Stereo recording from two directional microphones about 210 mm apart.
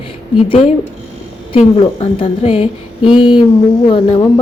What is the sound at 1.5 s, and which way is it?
A woman's voice, 25° left (ahead or behind).